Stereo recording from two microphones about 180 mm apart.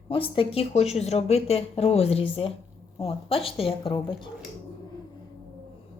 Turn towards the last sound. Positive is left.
turn(degrees=25)  # may be behind; listen again after turning